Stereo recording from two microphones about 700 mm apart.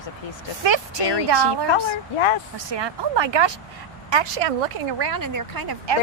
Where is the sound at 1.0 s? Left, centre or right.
Left.